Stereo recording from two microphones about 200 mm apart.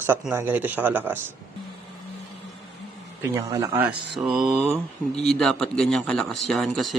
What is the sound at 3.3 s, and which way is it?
Speech, 15° right (ahead or behind).